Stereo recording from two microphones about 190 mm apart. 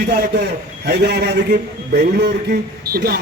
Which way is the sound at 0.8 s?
60° right (ahead or behind).